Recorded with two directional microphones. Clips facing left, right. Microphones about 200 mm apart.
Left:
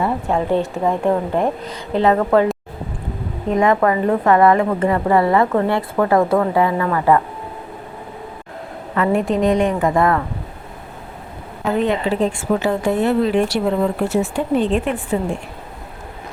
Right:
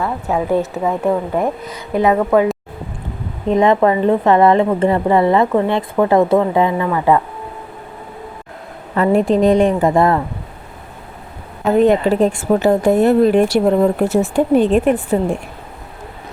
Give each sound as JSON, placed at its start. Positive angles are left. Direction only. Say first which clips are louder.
{"t": 0.3, "sound": "a woman's voice", "louder": "right 4 dB", "side_deg": -5}
{"t": 3.5, "sound": "a woman's voice", "louder": "right 3 dB", "side_deg": -20}
{"t": 9.0, "sound": "a woman's voice", "louder": "right 4 dB", "side_deg": -35}
{"t": 11.8, "sound": "speech", "louder": "right 6 dB", "side_deg": -45}